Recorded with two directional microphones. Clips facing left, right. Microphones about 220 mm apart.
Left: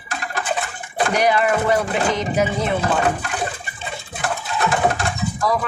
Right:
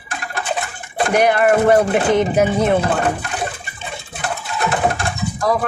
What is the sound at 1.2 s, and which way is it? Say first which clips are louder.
Speech: right 5 dB; 55° right (ahead or behind).